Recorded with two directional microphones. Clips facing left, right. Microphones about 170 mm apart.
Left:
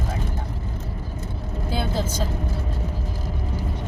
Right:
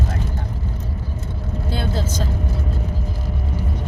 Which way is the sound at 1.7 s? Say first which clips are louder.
Even; 10° left (ahead or behind).